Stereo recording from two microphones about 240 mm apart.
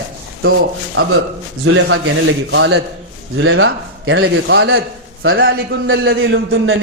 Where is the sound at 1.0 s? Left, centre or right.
Right.